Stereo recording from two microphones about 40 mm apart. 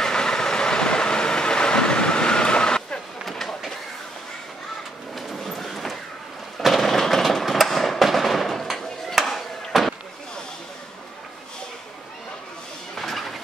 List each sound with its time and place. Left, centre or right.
0.0 s train: centre
3.3 s train: centre
5.1 s a sound: centre
9.1 s chop: centre
12.9 s vehicle: centre